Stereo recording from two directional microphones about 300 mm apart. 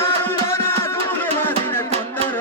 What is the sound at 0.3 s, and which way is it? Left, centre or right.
Music, centre.